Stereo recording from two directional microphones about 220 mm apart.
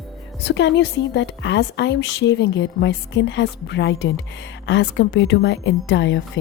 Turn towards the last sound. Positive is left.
turn(degrees=55)  # may be behind; listen again after turning